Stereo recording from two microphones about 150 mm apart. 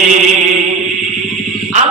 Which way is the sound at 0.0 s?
50° right (ahead or behind).